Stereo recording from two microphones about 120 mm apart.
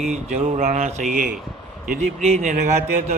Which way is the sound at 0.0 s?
65° right (ahead or behind).